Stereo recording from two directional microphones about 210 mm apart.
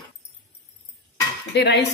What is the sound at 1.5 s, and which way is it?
Speech, 55° left (ahead or behind).